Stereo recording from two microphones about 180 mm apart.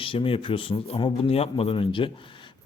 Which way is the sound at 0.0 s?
30° left (ahead or behind).